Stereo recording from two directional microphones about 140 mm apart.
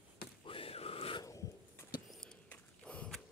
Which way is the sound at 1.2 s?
25° left (ahead or behind).